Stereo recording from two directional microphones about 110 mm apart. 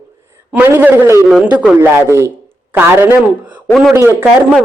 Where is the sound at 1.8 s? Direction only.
20° right (ahead or behind).